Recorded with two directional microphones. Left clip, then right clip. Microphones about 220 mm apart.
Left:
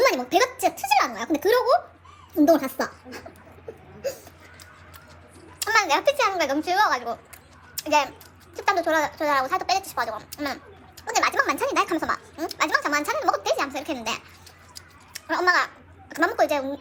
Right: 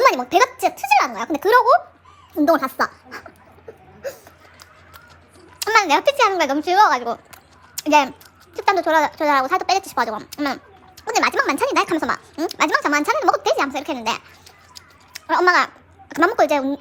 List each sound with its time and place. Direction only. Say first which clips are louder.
0.0 s a child's voice: right 5 dB; 25° right (ahead or behind)
5.5 s a child's voice: right 5 dB; 25° right (ahead or behind)
14.8 s a sound: right 2 dB; 25° right (ahead or behind)